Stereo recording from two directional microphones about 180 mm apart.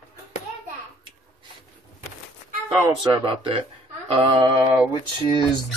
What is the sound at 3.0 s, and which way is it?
Speech, 30° right (ahead or behind).